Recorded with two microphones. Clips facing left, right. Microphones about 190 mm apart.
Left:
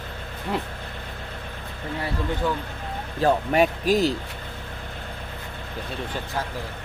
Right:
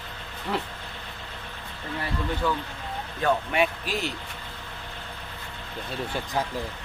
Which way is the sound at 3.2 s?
40° left (ahead or behind).